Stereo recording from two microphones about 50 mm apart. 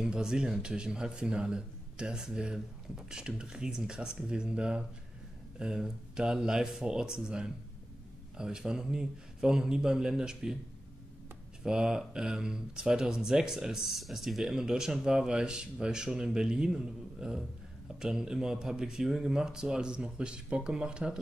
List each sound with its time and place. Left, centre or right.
0.0 s speech: centre
11.6 s speech: centre